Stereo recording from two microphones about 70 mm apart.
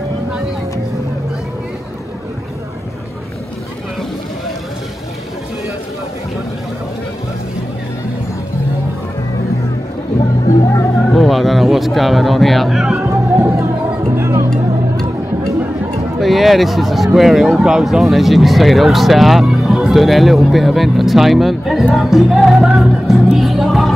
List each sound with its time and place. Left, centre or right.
11.1 s a sound: centre
13.0 s music: right
16.2 s speech: centre
21.9 s music: centre